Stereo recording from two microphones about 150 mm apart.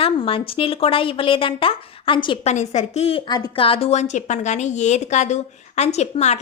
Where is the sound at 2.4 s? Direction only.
50° left (ahead or behind).